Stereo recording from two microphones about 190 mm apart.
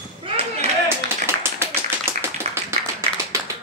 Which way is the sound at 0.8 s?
10° right (ahead or behind).